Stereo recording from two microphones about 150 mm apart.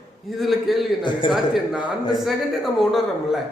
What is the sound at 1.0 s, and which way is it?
Speech, 30° left (ahead or behind).